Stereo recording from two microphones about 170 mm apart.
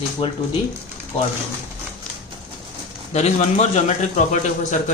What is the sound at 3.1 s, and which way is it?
Speech, 40° left (ahead or behind).